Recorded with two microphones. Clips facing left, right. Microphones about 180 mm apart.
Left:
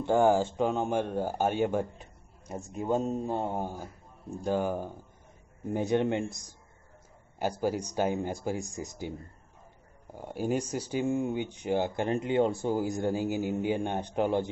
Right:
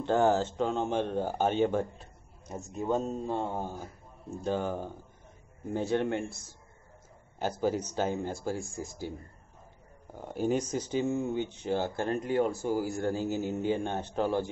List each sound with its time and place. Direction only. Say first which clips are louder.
0.0 s speech: left 2 dB; 10° left (ahead or behind)
10.1 s speech: right 1 dB; 10° left (ahead or behind)